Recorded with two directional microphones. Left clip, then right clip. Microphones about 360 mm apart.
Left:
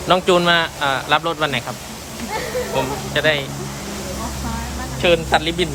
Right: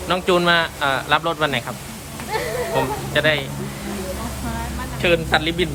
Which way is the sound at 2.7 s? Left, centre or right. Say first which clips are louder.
Right 1 dB; centre.